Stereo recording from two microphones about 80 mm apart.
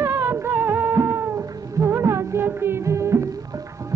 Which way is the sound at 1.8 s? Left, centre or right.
Right.